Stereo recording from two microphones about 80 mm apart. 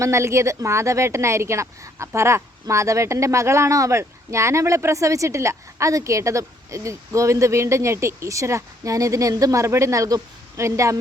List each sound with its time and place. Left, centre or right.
0.0 s a woman's voice: right